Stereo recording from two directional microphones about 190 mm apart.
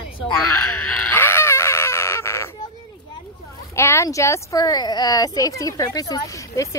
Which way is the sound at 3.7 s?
15° left (ahead or behind).